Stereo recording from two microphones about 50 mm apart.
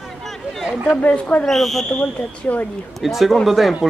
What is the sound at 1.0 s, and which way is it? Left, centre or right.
Speech, left.